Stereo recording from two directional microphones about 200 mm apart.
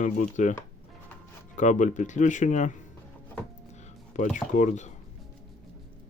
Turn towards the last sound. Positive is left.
turn(degrees=35)  # may be behind; listen again after turning